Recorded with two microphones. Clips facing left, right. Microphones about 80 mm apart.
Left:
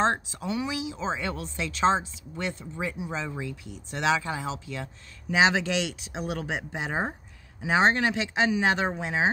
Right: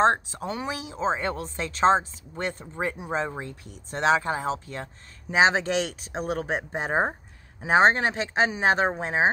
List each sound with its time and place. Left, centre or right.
0.0 s speech: right